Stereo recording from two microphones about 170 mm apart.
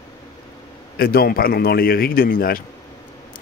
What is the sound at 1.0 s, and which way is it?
Speech, 65° left (ahead or behind).